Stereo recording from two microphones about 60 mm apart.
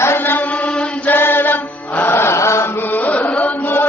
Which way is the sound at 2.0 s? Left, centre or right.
Left.